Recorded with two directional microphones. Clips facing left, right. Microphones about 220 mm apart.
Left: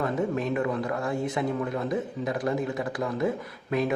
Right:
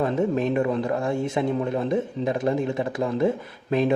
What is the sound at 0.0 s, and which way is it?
A man's voice, 25° right (ahead or behind).